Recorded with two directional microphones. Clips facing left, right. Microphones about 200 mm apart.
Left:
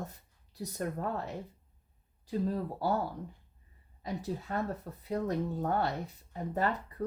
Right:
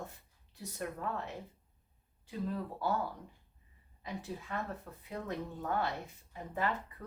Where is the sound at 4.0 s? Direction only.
40° left (ahead or behind).